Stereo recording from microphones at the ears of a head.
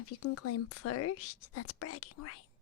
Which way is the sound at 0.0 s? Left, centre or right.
Left.